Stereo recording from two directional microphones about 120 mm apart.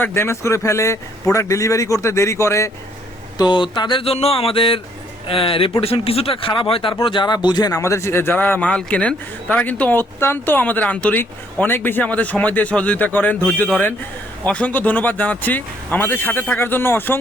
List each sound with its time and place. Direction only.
0.0 s speech: 20° left (ahead or behind)
3.3 s a sound: 40° left (ahead or behind)
7.0 s speech: 45° left (ahead or behind); by 17.2 s 15° left (ahead or behind)